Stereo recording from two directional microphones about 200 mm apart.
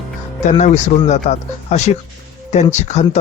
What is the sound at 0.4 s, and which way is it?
Speech, 35° left (ahead or behind).